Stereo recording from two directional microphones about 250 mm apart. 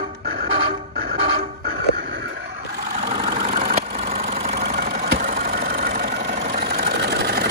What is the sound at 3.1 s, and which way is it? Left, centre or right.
Vehicle, right.